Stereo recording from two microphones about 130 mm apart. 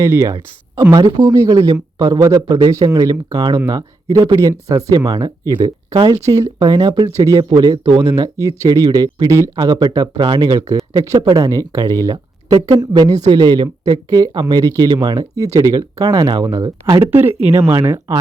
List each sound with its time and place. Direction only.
0.0 s speech: 20° right (ahead or behind)